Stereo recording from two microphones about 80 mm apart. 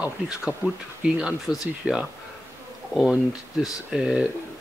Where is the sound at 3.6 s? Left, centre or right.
Centre.